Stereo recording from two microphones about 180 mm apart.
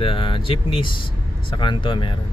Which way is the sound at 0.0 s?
30° left (ahead or behind).